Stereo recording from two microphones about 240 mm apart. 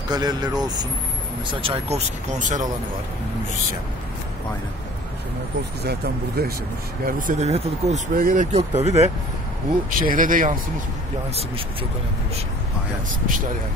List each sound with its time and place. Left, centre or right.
0.1 s speech: centre; by 2.6 s right
5.9 s speech: right